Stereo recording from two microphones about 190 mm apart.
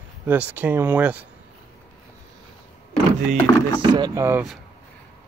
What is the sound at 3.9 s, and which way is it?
Speech, 20° right (ahead or behind).